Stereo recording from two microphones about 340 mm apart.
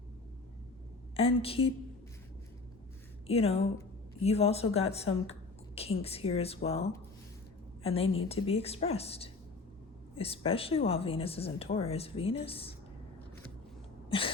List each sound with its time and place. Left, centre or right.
1.1 s a woman's voice: centre
3.2 s a woman's voice: centre